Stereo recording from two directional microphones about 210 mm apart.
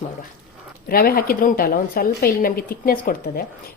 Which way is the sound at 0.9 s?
45° left (ahead or behind).